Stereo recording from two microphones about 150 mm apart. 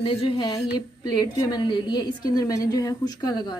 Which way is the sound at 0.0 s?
35° left (ahead or behind).